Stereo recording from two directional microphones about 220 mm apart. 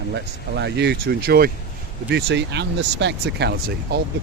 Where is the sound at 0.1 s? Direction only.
50° right (ahead or behind).